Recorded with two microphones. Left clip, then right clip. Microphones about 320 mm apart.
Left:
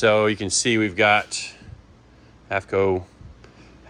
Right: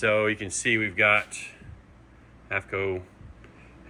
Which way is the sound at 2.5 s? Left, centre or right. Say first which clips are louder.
Left 7 dB; centre.